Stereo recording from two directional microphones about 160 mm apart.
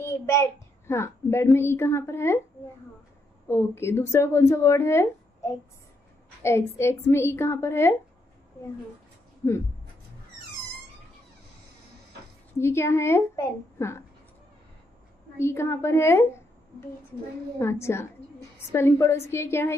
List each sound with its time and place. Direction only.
0.0 s a child's voice: 15° left (ahead or behind)
3.4 s a woman's voice: 15° left (ahead or behind)
9.4 s a woman's voice: 15° left (ahead or behind)
12.5 s a woman's voice: 15° left (ahead or behind)
15.3 s a woman's voice: 15° left (ahead or behind)
17.6 s a woman's voice: 15° left (ahead or behind)